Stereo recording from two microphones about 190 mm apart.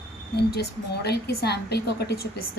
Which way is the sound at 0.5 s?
55° left (ahead or behind).